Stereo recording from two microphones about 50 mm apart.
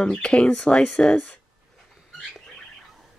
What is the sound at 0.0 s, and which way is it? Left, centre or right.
Speech, centre.